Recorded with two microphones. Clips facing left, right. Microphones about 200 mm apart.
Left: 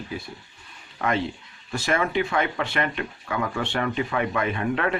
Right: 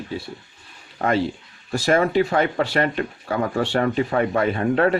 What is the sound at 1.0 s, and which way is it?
Speech, 40° right (ahead or behind).